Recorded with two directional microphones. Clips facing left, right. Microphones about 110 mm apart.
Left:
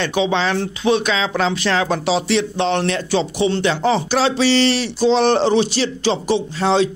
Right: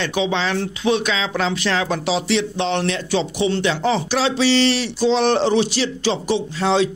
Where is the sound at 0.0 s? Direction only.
35° left (ahead or behind).